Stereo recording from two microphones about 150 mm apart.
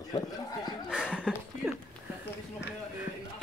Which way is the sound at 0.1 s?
25° left (ahead or behind).